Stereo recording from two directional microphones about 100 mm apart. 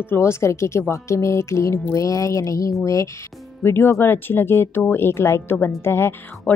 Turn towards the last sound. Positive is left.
turn(degrees=25)  # may be behind; listen again after turning